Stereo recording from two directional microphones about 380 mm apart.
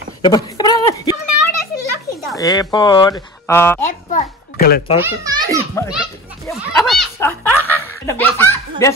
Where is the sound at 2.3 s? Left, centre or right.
Centre.